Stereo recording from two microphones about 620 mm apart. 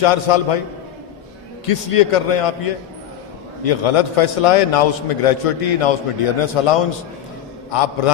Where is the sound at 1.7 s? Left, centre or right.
Left.